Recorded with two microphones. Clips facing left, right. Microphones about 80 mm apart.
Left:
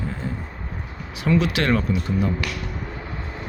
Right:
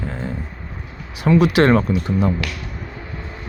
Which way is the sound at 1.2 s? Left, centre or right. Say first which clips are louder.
Right 6 dB; right.